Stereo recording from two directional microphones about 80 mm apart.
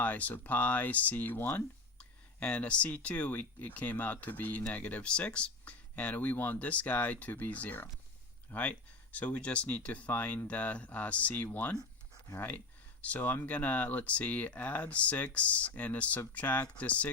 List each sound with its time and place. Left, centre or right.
0.0 s speech: centre